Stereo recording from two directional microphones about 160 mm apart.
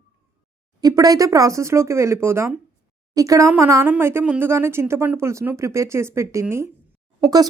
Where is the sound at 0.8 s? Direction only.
25° right (ahead or behind).